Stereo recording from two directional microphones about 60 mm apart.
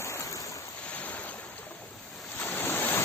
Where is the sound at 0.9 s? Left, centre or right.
Left.